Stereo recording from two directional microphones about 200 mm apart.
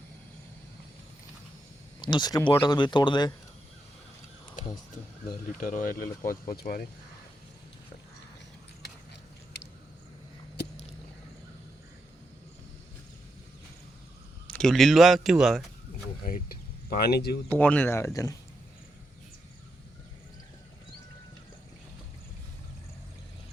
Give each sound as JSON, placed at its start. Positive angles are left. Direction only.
{"t": 2.0, "sound": "speech", "side_deg": 25}
{"t": 5.3, "sound": "speech", "side_deg": 45}
{"t": 14.4, "sound": "a man's voice", "side_deg": 5}
{"t": 17.0, "sound": "speech", "side_deg": 55}
{"t": 17.5, "sound": "speech", "side_deg": 10}